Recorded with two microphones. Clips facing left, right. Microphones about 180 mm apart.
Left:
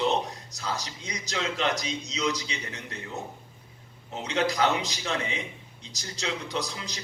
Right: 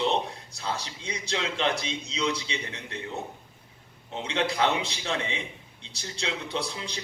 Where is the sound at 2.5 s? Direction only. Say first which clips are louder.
Right 2 dB; 35° left (ahead or behind).